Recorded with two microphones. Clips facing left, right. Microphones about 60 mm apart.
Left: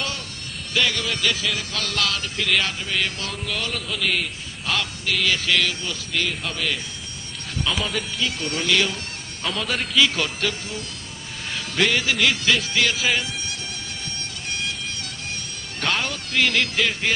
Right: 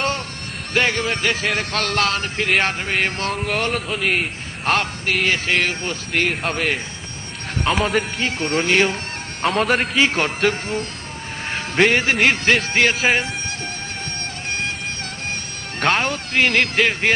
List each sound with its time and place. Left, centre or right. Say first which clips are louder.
0.7 s speech: right 4 dB; right
8.2 s speech: right 5 dB; right
9.4 s speech: right 8 dB; right
9.9 s speech: right 3 dB; right
15.8 s speech: right 6 dB; right